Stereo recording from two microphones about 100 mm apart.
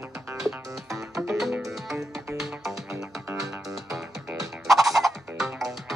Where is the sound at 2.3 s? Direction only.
5° right (ahead or behind).